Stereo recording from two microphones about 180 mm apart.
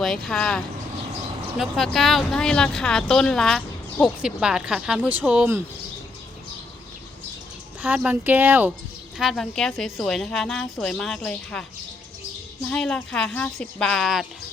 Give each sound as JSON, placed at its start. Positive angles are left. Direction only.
{"t": 0.0, "sound": "speech", "side_deg": 0}
{"t": 7.8, "sound": "speech", "side_deg": -5}
{"t": 12.7, "sound": "speech", "side_deg": 5}